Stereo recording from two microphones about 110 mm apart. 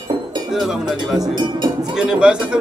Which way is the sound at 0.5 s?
Centre (ahead or behind).